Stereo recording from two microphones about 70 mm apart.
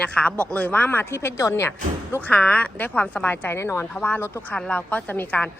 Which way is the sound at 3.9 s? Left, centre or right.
Left.